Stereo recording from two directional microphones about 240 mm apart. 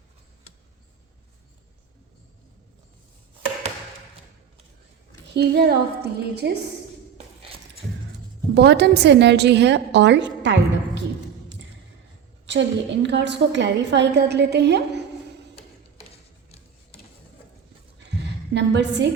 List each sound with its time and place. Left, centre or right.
5.3 s a woman's voice: right
8.5 s a woman's voice: right
12.5 s a woman's voice: right
18.5 s a woman's voice: right